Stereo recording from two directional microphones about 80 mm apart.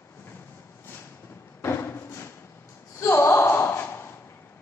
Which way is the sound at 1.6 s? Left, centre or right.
Left.